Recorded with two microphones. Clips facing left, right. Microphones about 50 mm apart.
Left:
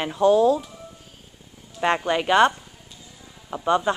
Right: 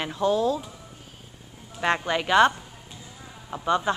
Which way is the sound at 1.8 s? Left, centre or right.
Centre.